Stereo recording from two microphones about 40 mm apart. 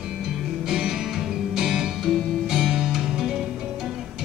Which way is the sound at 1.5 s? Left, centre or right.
Centre.